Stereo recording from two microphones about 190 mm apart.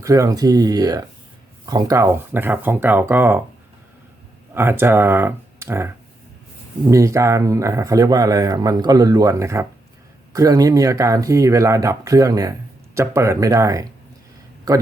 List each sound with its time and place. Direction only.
0.0 s speech: 15° right (ahead or behind)
4.5 s speech: 10° right (ahead or behind)
6.9 s speech: 15° right (ahead or behind)